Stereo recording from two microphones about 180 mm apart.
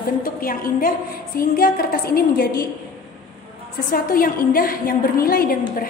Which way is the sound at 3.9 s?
55° left (ahead or behind).